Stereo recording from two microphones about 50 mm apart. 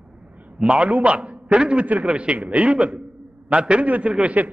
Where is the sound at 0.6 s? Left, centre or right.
Right.